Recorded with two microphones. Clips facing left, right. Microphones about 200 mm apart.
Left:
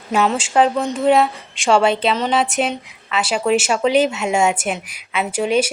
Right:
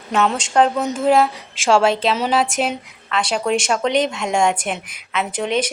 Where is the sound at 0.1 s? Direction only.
5° left (ahead or behind).